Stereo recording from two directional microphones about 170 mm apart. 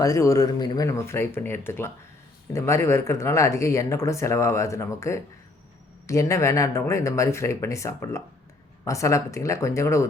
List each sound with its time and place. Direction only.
0.0 s speech: 20° left (ahead or behind)